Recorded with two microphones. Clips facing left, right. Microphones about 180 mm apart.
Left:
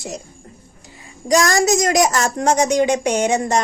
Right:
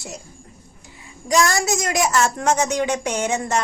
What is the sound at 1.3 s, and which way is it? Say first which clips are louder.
A child's voice: left 4 dB; 40° left (ahead or behind).